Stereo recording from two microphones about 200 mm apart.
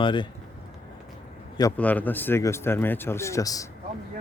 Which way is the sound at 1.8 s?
10° left (ahead or behind).